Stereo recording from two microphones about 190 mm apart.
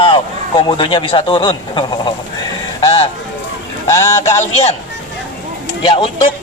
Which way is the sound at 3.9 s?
15° left (ahead or behind).